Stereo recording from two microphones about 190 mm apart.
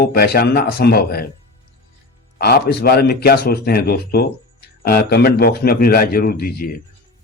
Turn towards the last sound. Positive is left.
turn(degrees=50)  # may be behind; listen again after turning